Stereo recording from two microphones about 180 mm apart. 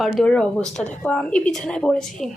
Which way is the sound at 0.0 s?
5° left (ahead or behind).